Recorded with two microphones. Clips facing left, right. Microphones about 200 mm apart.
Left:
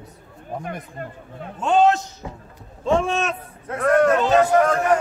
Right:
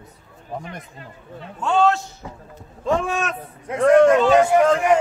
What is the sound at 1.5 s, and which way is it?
Speech, 20° left (ahead or behind).